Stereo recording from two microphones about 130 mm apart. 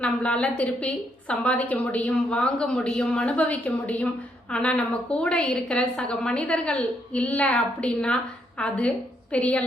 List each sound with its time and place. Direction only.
0.0 s a woman's voice: 10° left (ahead or behind)